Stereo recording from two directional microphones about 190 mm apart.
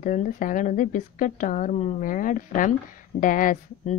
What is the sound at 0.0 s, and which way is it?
A woman's voice, 45° left (ahead or behind).